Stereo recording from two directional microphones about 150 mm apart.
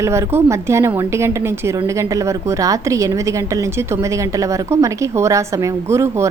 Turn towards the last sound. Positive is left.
turn(degrees=-20)  # may be behind; listen again after turning